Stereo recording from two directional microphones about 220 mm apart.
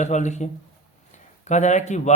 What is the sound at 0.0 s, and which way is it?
Speech, 30° left (ahead or behind).